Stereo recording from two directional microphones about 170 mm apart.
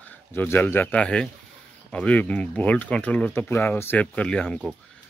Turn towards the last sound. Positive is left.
turn(degrees=5)  # may be behind; listen again after turning